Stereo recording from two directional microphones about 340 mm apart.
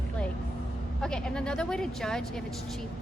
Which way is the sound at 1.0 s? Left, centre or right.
Centre.